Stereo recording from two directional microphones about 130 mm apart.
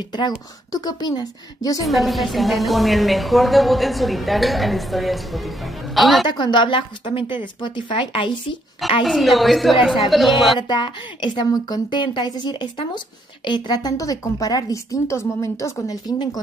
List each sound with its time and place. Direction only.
0.7 s a woman's voice: 30° left (ahead or behind)
1.9 s a woman's voice: centre (ahead or behind)
6.2 s a woman's voice: 35° left (ahead or behind)
9.0 s a woman's voice: centre (ahead or behind)
10.7 s a woman's voice: 35° left (ahead or behind)